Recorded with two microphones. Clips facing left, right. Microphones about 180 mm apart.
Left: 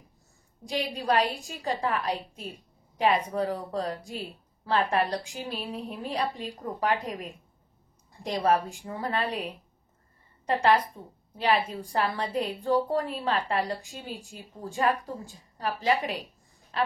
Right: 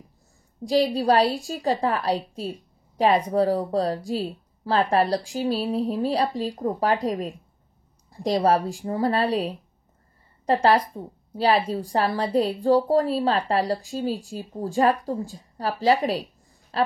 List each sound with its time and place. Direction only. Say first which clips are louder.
0.7 s a woman's voice: right 8 dB; 35° right (ahead or behind)